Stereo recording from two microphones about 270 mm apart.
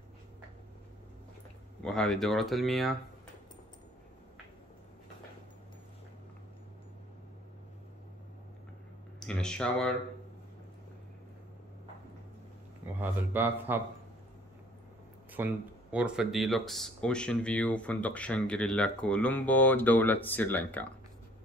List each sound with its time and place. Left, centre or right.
1.9 s speech: centre
9.2 s speech: centre
13.0 s speech: centre
15.3 s speech: centre